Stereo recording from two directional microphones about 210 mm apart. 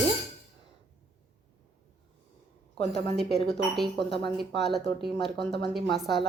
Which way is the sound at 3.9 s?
55° right (ahead or behind).